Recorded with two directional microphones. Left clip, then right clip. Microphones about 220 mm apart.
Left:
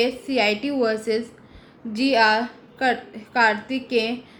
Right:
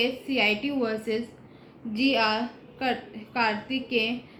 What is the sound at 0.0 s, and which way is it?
A woman's voice, 20° left (ahead or behind).